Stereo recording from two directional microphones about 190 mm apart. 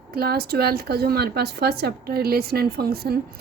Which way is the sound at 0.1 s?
55° right (ahead or behind).